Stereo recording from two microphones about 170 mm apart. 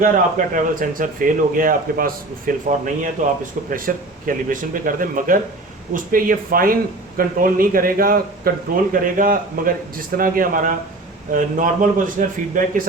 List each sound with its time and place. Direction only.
0.0 s a man's voice: 55° right (ahead or behind)